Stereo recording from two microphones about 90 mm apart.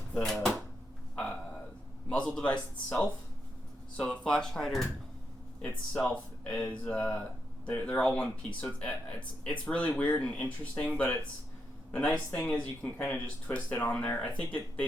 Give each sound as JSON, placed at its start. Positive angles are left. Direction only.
{"t": 0.1, "sound": "speech", "side_deg": 10}
{"t": 1.1, "sound": "a sound", "side_deg": 15}
{"t": 2.0, "sound": "speech", "side_deg": 10}